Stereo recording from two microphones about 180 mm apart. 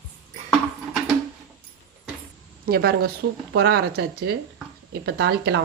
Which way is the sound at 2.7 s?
60° right (ahead or behind).